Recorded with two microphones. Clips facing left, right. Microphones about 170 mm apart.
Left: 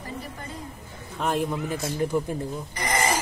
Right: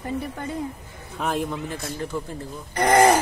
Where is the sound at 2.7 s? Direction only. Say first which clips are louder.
Right 10 dB; 65° right (ahead or behind).